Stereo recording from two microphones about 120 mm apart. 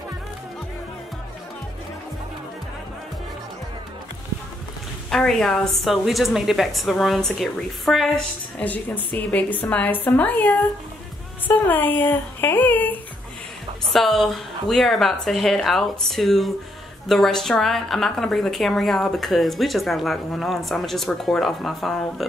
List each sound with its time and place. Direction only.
5.1 s a woman's voice: 5° left (ahead or behind)
8.5 s a woman's voice: 15° left (ahead or behind)
13.9 s a woman's voice: centre (ahead or behind)